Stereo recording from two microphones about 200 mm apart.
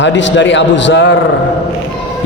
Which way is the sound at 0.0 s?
65° left (ahead or behind).